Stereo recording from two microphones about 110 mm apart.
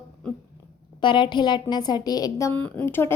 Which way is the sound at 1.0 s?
45° left (ahead or behind).